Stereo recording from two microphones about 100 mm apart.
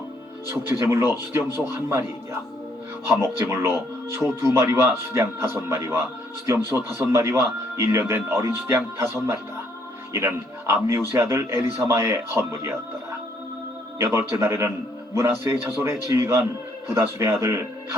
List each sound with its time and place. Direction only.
0.4 s a man's voice: 25° right (ahead or behind)
3.1 s a man's voice: 25° right (ahead or behind)
14.0 s a man's voice: 25° right (ahead or behind)